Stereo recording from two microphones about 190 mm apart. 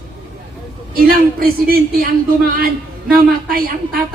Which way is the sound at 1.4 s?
50° right (ahead or behind).